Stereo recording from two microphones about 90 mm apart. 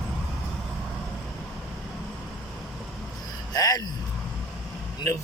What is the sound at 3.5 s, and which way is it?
Speech, 45° left (ahead or behind).